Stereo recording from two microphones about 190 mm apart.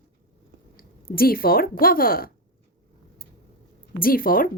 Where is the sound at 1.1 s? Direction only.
50° left (ahead or behind).